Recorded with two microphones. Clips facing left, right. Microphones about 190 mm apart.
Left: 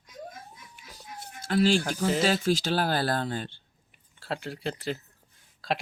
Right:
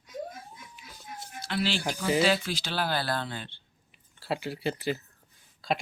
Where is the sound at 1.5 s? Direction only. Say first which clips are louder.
Left 6 dB; 45° left (ahead or behind).